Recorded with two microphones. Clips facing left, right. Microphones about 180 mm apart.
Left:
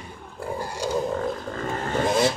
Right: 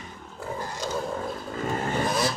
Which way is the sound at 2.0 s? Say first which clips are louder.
Left 8 dB; 25° left (ahead or behind).